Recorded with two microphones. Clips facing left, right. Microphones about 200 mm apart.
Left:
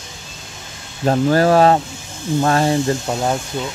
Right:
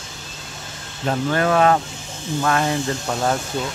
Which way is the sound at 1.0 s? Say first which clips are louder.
Left 6 dB; 35° left (ahead or behind).